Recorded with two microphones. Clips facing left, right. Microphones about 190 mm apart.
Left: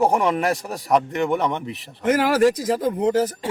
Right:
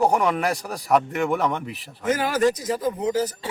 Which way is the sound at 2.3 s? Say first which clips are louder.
Left 4 dB; 60° left (ahead or behind).